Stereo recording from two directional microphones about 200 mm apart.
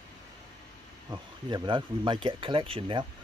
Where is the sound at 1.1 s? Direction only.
25° right (ahead or behind).